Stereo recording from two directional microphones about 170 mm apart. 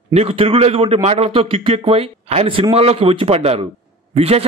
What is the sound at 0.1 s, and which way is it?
A man's voice, 35° right (ahead or behind).